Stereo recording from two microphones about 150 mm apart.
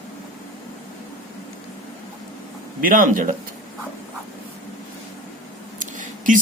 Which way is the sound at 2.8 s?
65° right (ahead or behind).